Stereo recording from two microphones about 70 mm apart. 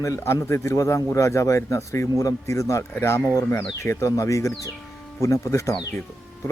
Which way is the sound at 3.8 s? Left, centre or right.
Left.